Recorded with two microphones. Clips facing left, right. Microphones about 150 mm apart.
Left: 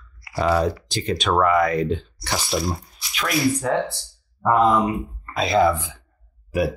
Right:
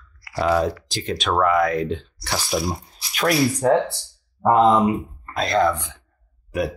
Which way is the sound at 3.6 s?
35° right (ahead or behind).